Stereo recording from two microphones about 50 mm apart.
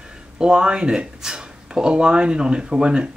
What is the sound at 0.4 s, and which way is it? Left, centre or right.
Speech, centre.